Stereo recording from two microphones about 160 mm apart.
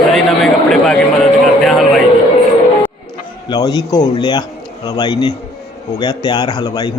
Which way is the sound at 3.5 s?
25° left (ahead or behind).